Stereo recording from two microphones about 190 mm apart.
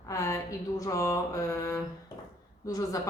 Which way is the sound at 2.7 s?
20° left (ahead or behind).